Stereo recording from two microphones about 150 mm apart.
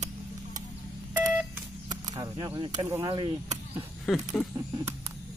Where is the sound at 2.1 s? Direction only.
30° right (ahead or behind).